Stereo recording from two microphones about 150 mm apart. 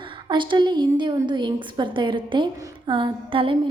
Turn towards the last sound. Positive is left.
turn(degrees=-35)  # may be behind; listen again after turning